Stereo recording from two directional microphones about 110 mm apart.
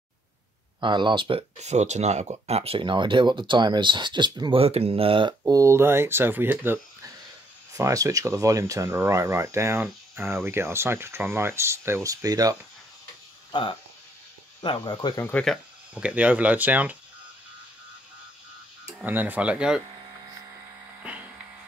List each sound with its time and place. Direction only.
0.7 s speech: 45° right (ahead or behind)
1.6 s speech: 90° right
2.3 s speech: 70° right (ahead or behind)
5.5 s speech: 25° right (ahead or behind)
7.7 s speech: 30° right (ahead or behind)
13.5 s speech: 45° left (ahead or behind)
15.1 s speech: 20° left (ahead or behind)
15.9 s speech: 10° right (ahead or behind)
19.0 s speech: 15° right (ahead or behind)